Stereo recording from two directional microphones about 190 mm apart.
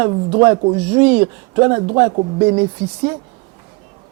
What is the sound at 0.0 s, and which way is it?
A man's voice, 20° right (ahead or behind).